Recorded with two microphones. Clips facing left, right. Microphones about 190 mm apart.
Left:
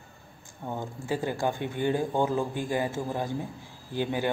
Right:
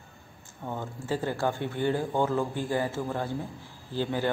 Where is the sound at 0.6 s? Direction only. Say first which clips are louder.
Left 1 dB; 15° left (ahead or behind).